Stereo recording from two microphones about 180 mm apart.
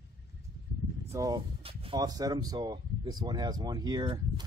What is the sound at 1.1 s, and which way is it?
Speech, 20° right (ahead or behind).